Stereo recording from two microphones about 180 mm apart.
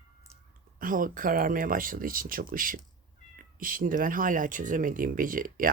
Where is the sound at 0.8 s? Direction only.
50° right (ahead or behind).